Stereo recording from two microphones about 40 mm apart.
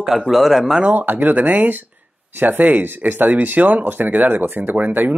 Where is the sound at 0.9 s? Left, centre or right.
Right.